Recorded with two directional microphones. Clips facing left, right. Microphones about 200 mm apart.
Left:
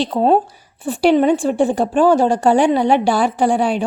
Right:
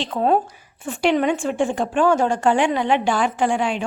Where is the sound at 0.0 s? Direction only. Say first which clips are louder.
Left 5 dB; 35° left (ahead or behind).